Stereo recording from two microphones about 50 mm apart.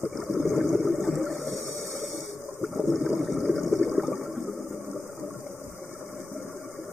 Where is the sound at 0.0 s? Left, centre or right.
Left.